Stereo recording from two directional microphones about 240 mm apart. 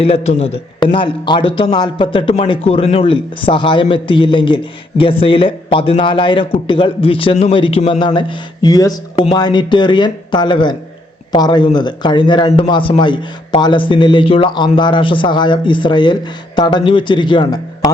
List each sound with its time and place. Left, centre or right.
0.3 s a man's voice: left